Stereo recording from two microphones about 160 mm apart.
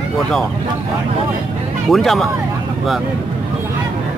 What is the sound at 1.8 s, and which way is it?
Speech, centre (ahead or behind).